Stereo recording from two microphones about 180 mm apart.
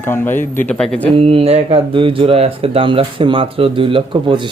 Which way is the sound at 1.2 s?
35° right (ahead or behind).